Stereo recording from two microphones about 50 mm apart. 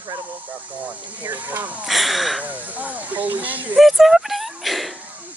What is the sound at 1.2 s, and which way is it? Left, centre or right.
Hiss, right.